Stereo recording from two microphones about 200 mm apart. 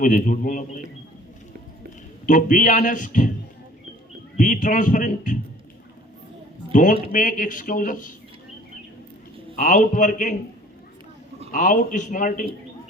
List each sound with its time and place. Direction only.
0.0 s speech: 40° left (ahead or behind)
2.2 s speech: 40° left (ahead or behind)
4.4 s speech: 40° left (ahead or behind)
6.7 s speech: 40° left (ahead or behind)
9.6 s speech: 40° left (ahead or behind)
11.5 s speech: 40° left (ahead or behind)